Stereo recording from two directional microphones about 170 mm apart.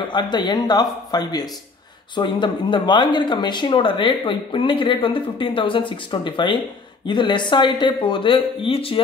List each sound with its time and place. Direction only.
0.1 s speech: 25° left (ahead or behind)